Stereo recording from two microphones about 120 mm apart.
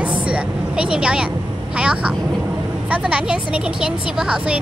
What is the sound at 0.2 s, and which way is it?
A woman's voice, 10° right (ahead or behind).